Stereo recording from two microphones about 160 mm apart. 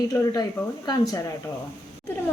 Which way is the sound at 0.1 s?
20° left (ahead or behind).